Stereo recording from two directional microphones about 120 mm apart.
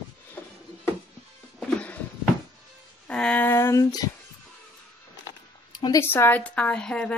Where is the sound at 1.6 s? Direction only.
10° left (ahead or behind).